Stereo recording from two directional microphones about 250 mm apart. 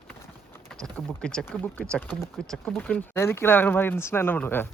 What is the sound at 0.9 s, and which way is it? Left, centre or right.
Speech, centre.